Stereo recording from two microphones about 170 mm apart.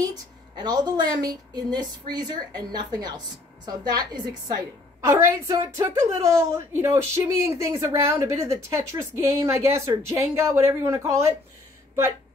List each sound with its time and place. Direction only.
0.6 s a woman's voice: 25° right (ahead or behind)